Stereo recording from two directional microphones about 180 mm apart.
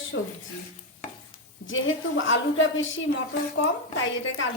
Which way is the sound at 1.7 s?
90° left.